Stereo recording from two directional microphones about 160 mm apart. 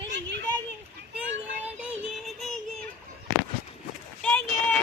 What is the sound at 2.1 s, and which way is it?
Music, centre (ahead or behind).